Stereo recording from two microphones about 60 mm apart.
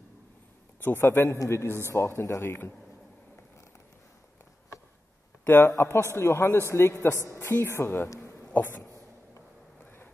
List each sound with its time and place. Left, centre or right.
1.0 s speech: left
5.4 s speech: left
8.5 s a sound: left